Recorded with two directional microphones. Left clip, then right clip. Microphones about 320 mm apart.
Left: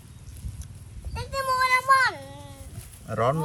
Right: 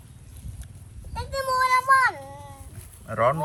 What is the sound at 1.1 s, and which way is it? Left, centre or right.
Child singing, centre.